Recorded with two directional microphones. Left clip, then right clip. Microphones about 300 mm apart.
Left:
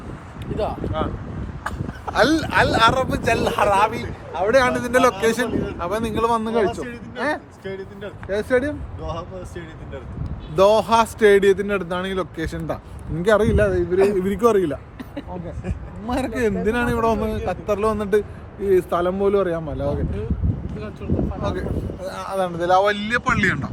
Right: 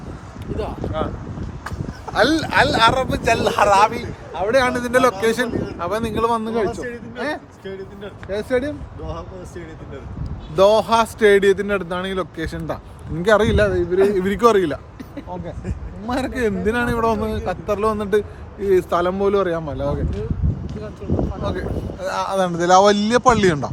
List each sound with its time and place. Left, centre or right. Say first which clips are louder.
0.8 s a man's voice: right 1 dB; centre
1.6 s a sound: left 3 dB; centre
2.1 s a man's voice: right 1 dB; centre
7.6 s speech: left 1 dB; left
8.3 s a man's voice: left 1 dB; centre
10.5 s a man's voice: right 1 dB; centre
16.0 s a man's voice: right 1 dB; centre
21.4 s a man's voice: right 1 dB; centre
22.0 s speech: right 9 dB; right
22.3 s speech: right 3 dB; right
22.9 s speech: right 6 dB; centre